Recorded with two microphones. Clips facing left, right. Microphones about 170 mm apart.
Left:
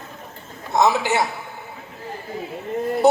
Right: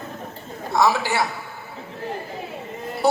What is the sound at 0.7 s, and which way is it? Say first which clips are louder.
Speech: left 2 dB; 20° left (ahead or behind).